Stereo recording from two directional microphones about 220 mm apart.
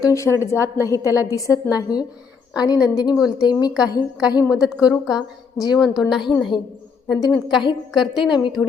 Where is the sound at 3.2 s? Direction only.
5° right (ahead or behind).